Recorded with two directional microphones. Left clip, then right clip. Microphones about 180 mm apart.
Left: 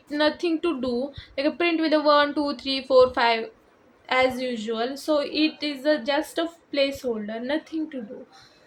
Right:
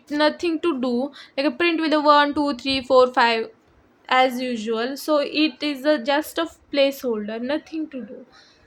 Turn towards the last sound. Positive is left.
turn(degrees=-35)  # may be behind; listen again after turning